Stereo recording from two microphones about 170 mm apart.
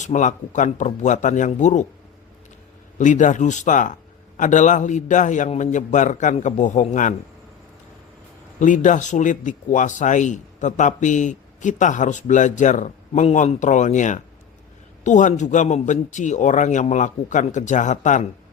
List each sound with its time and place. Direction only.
0.0 s speech: 45° left (ahead or behind)
3.0 s speech: 50° left (ahead or behind)
8.5 s speech: 50° left (ahead or behind)